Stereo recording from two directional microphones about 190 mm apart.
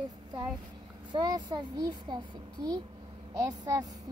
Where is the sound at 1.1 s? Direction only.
20° right (ahead or behind).